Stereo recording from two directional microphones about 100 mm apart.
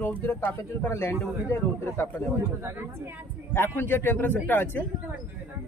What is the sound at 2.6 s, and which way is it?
Speech, 20° right (ahead or behind).